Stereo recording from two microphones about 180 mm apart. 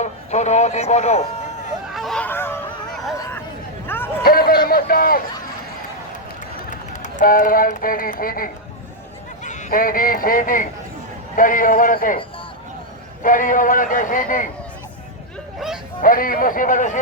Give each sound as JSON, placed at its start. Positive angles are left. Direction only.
{"t": 0.0, "sound": "speech", "side_deg": 40}
{"t": 1.9, "sound": "speech", "side_deg": 0}
{"t": 2.9, "sound": "vehicle", "side_deg": 0}
{"t": 3.8, "sound": "a sound", "side_deg": 10}
{"t": 4.2, "sound": "a sound", "side_deg": 55}
{"t": 4.7, "sound": "a man's voice", "side_deg": 55}
{"t": 6.7, "sound": "a man's voice", "side_deg": 45}
{"t": 13.2, "sound": "a man's voice", "side_deg": 45}
{"t": 16.0, "sound": "a man's voice", "side_deg": 50}